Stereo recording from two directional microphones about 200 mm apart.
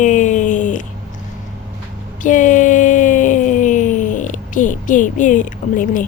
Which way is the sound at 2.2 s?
40° left (ahead or behind).